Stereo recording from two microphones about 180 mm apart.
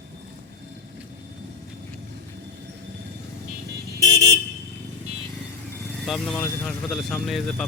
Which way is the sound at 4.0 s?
15° left (ahead or behind).